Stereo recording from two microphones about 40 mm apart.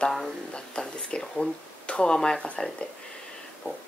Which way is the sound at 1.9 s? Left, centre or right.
Left.